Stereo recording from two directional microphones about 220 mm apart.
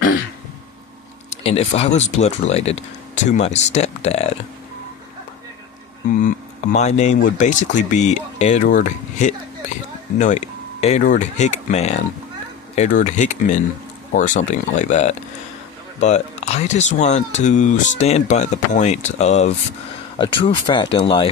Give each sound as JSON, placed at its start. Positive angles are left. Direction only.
{"t": 1.3, "sound": "speech", "side_deg": 25}
{"t": 6.2, "sound": "speech", "side_deg": 30}